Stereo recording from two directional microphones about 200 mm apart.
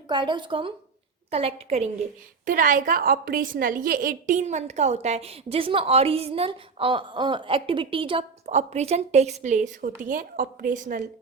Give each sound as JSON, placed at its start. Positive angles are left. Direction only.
{"t": 0.1, "sound": "a woman's voice", "side_deg": -25}
{"t": 2.4, "sound": "a woman's voice", "side_deg": -40}